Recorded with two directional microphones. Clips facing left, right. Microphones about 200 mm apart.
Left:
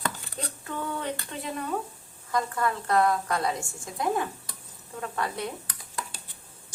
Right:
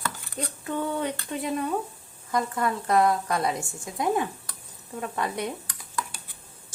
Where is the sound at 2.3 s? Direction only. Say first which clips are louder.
Right 1 dB; 20° right (ahead or behind).